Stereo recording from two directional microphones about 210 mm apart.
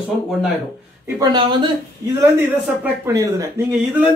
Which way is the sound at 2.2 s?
10° right (ahead or behind).